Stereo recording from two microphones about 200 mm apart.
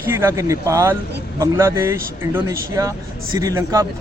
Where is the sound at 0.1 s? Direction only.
10° right (ahead or behind).